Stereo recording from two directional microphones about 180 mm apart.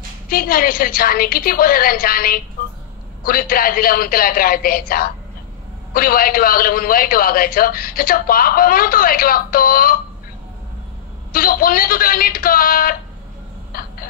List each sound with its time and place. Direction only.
0.3 s a man's voice: 55° left (ahead or behind)
11.3 s a man's voice: 55° left (ahead or behind)
13.7 s a sound: 55° left (ahead or behind)